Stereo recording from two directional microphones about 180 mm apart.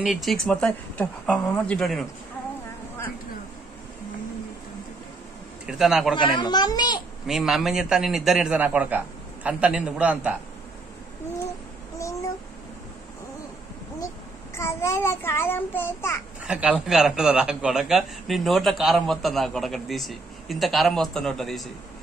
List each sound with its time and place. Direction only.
0.0 s a man's voice: centre (ahead or behind)
5.7 s a man's voice: centre (ahead or behind)
6.1 s a child's voice: 25° left (ahead or behind)
7.2 s a man's voice: centre (ahead or behind)
14.5 s a child's voice: 15° left (ahead or behind)
16.4 s a man's voice: 5° right (ahead or behind)